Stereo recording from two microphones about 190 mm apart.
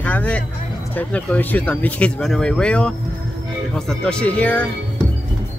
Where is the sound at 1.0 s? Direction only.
10° left (ahead or behind).